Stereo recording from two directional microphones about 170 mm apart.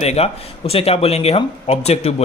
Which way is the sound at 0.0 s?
40° left (ahead or behind).